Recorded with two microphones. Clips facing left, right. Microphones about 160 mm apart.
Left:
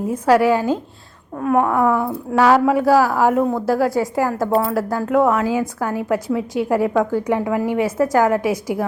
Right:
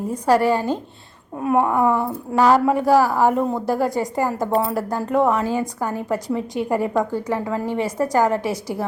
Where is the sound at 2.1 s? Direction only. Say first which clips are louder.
Left 1 dB; 5° left (ahead or behind).